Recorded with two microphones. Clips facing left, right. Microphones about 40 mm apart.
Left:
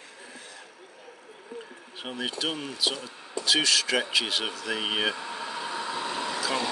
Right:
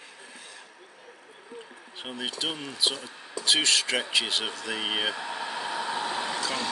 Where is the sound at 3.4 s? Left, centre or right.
Right.